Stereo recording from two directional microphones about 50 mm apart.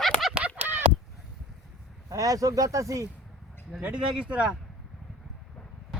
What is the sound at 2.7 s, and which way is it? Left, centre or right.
Speech, right.